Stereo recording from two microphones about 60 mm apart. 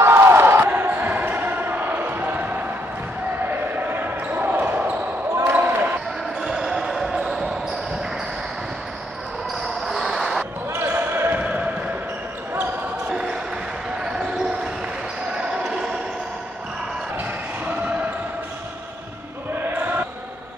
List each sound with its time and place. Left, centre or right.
0.0 s crowd: right
0.7 s basketball bounce: right
3.9 s basketball bounce: right
5.4 s basketball bounce: right
6.4 s basketball bounce: centre
9.8 s basketball bounce: centre
10.7 s basketball bounce: right
11.3 s basketball bounce: right
15.3 s basketball bounce: centre